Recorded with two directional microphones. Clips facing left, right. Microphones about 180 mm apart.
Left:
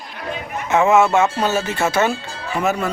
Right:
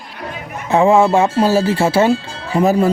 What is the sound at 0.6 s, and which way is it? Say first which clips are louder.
Speech: right 3 dB; 30° right (ahead or behind).